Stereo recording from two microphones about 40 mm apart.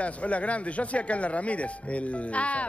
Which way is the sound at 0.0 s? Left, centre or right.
Left.